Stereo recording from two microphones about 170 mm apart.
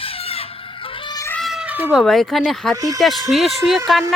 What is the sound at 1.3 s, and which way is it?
Cat, centre (ahead or behind).